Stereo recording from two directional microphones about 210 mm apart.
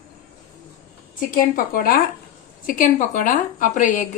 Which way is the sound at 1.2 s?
40° left (ahead or behind).